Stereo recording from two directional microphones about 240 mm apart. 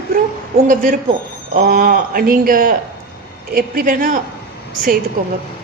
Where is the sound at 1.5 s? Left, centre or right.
Right.